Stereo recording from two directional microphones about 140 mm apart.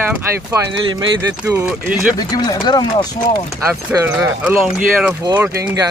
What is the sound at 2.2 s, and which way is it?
Speech, 30° left (ahead or behind).